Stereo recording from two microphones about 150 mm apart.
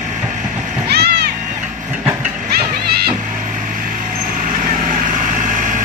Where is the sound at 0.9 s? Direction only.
90° right.